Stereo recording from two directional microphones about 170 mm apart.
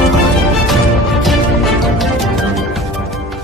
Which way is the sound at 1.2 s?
Centre (ahead or behind).